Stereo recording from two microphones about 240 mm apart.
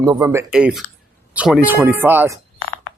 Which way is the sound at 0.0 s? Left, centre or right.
Centre.